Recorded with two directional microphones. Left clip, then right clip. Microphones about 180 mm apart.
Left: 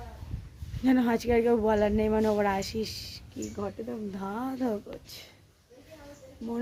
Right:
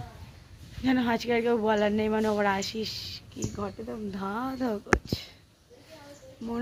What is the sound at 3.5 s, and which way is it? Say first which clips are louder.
Speech: left 1 dB; 15° right (ahead or behind).